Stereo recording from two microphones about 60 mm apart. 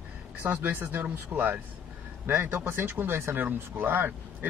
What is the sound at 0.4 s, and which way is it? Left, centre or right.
Speech, right.